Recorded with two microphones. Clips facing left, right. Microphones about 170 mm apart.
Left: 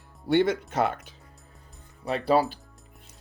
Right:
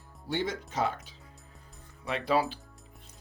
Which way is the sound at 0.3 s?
65° left (ahead or behind).